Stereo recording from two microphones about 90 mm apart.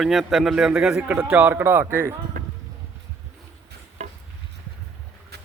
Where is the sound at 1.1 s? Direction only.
15° right (ahead or behind).